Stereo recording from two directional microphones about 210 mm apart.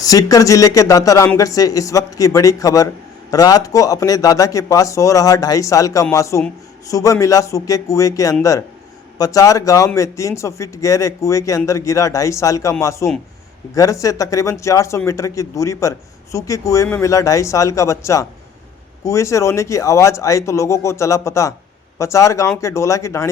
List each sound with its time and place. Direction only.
0.0 s a man's voice: 15° left (ahead or behind)